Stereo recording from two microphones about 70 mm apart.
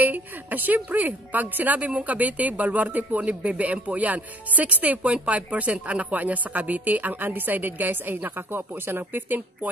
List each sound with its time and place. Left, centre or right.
0.0 s a woman's voice: right